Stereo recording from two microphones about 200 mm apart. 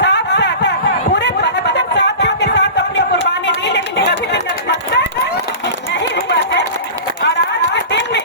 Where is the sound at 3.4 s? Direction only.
60° left (ahead or behind).